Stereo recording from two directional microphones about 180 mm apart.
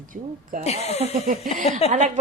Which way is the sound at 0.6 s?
35° left (ahead or behind).